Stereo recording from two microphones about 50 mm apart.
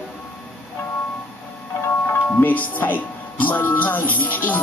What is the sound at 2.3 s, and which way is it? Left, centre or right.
Music, left.